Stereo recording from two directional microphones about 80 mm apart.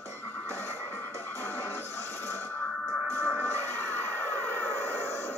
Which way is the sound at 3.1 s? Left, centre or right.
Left.